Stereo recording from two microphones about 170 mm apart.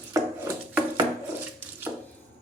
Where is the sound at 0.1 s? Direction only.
15° right (ahead or behind).